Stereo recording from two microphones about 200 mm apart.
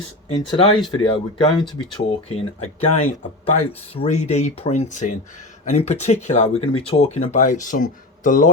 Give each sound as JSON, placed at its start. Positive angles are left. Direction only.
{"t": 0.3, "sound": "speech", "side_deg": 25}